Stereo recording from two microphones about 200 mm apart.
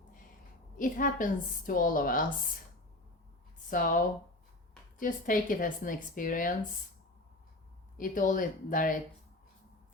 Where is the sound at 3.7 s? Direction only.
45° left (ahead or behind).